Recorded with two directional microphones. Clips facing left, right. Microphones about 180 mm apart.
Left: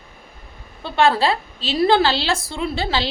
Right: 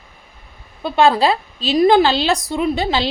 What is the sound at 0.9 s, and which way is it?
A woman's voice, 15° right (ahead or behind).